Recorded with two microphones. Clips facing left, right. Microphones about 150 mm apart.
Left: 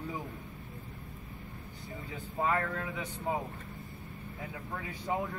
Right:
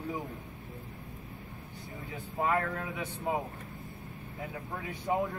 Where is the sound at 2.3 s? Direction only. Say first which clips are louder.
Right 1 dB; 20° right (ahead or behind).